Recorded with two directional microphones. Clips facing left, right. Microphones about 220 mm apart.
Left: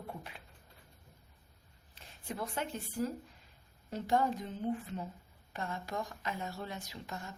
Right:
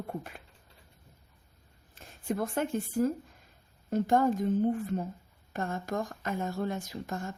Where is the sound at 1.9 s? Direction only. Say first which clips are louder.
Right 10 dB; 50° right (ahead or behind).